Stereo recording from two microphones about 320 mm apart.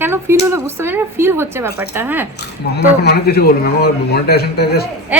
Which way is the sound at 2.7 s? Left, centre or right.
Left.